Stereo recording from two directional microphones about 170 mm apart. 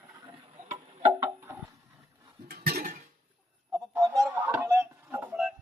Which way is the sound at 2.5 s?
65° right (ahead or behind).